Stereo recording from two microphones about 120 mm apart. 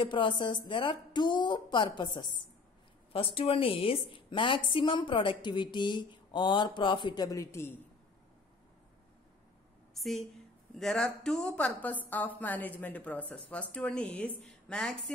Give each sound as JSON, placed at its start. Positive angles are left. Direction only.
{"t": 0.0, "sound": "a woman's voice", "side_deg": 45}
{"t": 9.9, "sound": "a woman's voice", "side_deg": 0}